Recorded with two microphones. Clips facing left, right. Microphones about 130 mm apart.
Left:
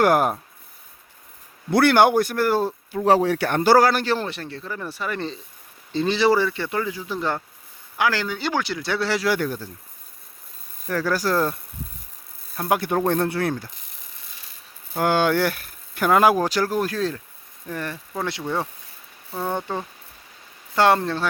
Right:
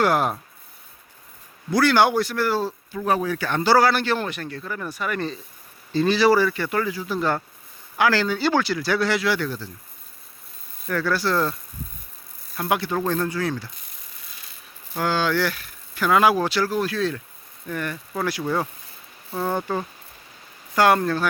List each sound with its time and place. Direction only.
0.0 s speech: 50° left (ahead or behind)
1.7 s speech: 55° left (ahead or behind)
3.2 s speech: 70° left (ahead or behind); by 9.6 s 45° left (ahead or behind)
10.8 s speech: 40° left (ahead or behind)
12.5 s speech: 35° left (ahead or behind)
13.2 s speech: 60° left (ahead or behind)
14.9 s speech: 50° left (ahead or behind)
17.7 s speech: 30° left (ahead or behind)
19.3 s speech: 5° right (ahead or behind)
20.7 s speech: 25° left (ahead or behind)